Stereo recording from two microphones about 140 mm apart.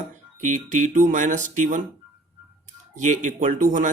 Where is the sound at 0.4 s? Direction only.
65° right (ahead or behind).